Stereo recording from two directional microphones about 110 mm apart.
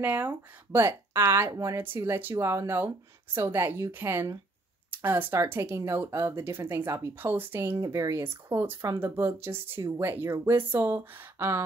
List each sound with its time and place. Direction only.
0.0 s speech: 15° right (ahead or behind)
1.8 s speech: 20° right (ahead or behind)
7.7 s speech: 30° right (ahead or behind)